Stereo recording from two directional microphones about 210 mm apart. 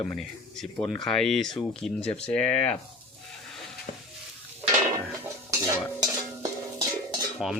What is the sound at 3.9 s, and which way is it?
Sizzle, 40° left (ahead or behind).